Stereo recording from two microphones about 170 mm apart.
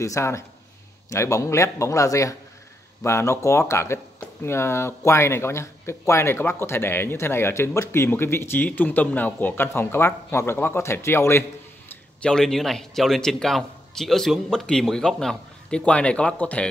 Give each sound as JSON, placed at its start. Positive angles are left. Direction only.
{"t": 0.0, "sound": "a man's voice", "side_deg": 15}